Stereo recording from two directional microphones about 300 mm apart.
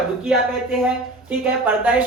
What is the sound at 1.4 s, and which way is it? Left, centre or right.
Speech, centre.